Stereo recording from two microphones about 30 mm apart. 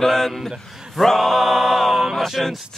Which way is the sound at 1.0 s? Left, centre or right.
Centre.